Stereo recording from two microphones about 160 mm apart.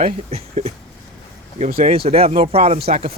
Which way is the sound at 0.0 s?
40° right (ahead or behind).